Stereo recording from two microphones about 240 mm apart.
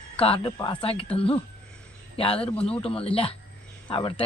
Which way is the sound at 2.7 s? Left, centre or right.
Left.